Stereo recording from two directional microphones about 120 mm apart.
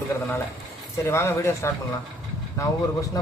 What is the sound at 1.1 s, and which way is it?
A man's voice, 20° left (ahead or behind).